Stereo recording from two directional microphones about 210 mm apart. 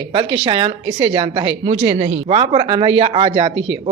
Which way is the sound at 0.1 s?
25° right (ahead or behind).